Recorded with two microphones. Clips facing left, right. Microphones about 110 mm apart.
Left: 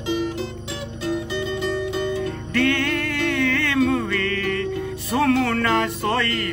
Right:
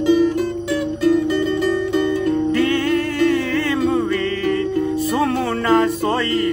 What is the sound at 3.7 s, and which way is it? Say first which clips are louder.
Music: right 2 dB; 15° right (ahead or behind).